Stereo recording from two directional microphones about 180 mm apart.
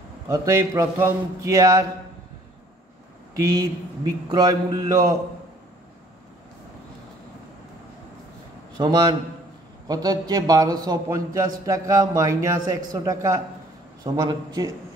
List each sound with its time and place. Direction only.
0.3 s a man's voice: 15° right (ahead or behind)
3.3 s a man's voice: 20° right (ahead or behind)
8.7 s a man's voice: 25° right (ahead or behind)